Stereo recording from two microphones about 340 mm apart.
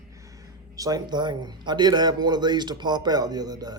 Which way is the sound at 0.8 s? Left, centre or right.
Centre.